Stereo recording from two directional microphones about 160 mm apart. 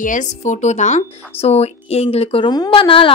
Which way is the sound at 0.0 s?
50° left (ahead or behind).